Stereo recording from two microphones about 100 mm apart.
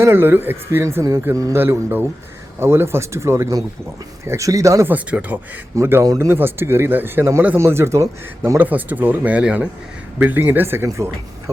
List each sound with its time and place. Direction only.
0.0 s speech: 20° right (ahead or behind)
1.5 s speech: 20° right (ahead or behind)
4.9 s speech: 15° right (ahead or behind)
5.7 s speech: 30° right (ahead or behind)
8.4 s speech: 20° right (ahead or behind)